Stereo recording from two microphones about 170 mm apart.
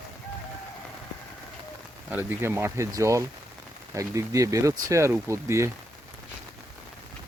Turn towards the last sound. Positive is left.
turn(degrees=-15)  # may be behind; listen again after turning